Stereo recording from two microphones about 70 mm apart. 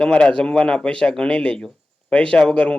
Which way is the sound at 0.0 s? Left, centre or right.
Centre.